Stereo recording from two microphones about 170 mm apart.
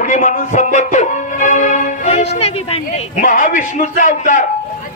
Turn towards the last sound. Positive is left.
turn(degrees=50)  # may be behind; listen again after turning